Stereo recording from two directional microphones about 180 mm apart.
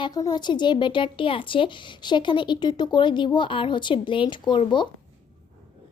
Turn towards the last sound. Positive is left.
turn(degrees=25)  # may be behind; listen again after turning